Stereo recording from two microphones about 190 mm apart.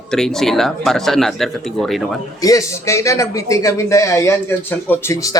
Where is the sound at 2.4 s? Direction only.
15° left (ahead or behind).